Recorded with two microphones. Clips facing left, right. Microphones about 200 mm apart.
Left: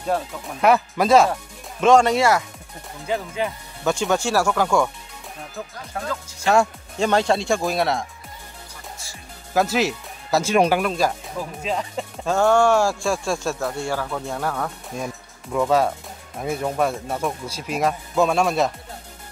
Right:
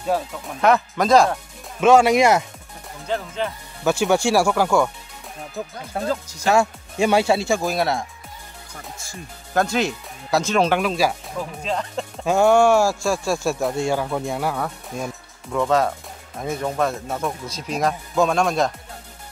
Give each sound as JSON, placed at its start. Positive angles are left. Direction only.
{"t": 0.0, "sound": "speech", "side_deg": 0}
{"t": 2.1, "sound": "speech", "side_deg": -20}
{"t": 3.1, "sound": "speech", "side_deg": 10}
{"t": 3.8, "sound": "speech", "side_deg": -10}
{"t": 6.4, "sound": "speech", "side_deg": 0}
{"t": 9.5, "sound": "speech", "side_deg": 5}
{"t": 10.8, "sound": "speech", "side_deg": -5}
{"t": 11.3, "sound": "speech", "side_deg": 5}
{"t": 12.3, "sound": "speech", "side_deg": -15}